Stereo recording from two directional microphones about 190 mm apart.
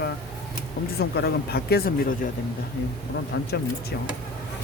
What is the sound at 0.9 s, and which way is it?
Speech, 55° left (ahead or behind).